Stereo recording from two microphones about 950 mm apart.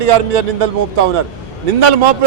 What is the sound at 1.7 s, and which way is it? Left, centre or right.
Speech, right.